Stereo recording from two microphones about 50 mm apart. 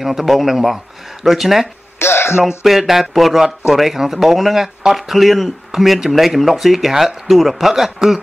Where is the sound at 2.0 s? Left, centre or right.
Left.